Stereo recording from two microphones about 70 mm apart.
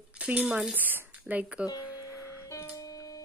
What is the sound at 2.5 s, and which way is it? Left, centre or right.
Music, left.